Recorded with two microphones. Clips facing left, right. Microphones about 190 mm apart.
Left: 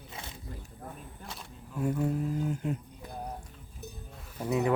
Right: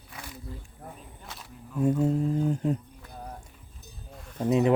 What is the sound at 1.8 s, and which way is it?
Speech, 25° right (ahead or behind).